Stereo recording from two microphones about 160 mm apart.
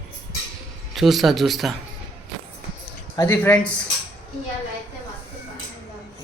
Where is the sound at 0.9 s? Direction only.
Centre (ahead or behind).